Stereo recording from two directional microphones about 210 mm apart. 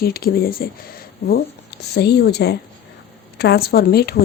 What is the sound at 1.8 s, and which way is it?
Speech, 50° left (ahead or behind).